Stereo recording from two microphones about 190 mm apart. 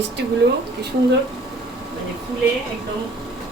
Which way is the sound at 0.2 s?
60° right (ahead or behind).